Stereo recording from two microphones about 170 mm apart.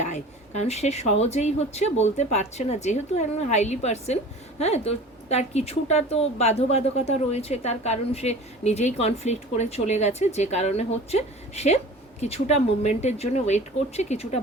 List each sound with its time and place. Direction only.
0.0 s a woman's voice: 40° left (ahead or behind)